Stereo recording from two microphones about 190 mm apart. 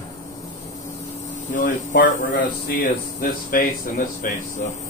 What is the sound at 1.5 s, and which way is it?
Speech, 45° left (ahead or behind).